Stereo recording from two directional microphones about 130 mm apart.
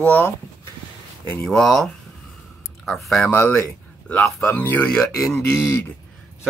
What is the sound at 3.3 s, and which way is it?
Speech, 15° left (ahead or behind).